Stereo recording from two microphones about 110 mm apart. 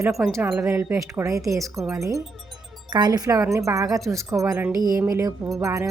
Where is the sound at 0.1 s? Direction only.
Centre (ahead or behind).